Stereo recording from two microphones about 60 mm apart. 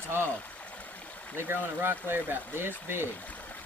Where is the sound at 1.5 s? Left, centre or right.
Right.